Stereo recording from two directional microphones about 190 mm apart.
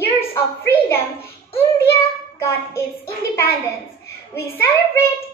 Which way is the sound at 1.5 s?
15° left (ahead or behind).